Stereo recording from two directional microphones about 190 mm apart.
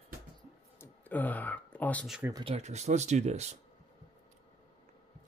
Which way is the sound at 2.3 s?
30° right (ahead or behind).